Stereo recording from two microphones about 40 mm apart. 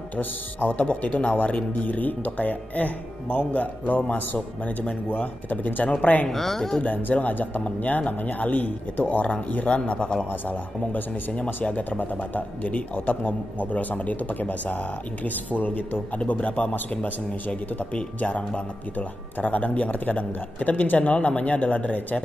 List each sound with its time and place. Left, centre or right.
0.1 s a man's voice: left
5.9 s a man's voice: left
6.2 s speech: centre
6.8 s speech: left
10.9 s speech: left
11.3 s a man's voice: left
12.0 s a man's voice: left